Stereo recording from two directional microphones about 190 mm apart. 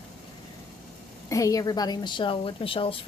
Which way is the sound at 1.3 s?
15° left (ahead or behind).